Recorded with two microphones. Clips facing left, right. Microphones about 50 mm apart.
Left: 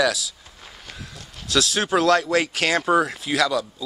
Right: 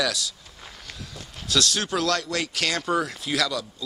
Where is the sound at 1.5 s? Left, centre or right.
Centre.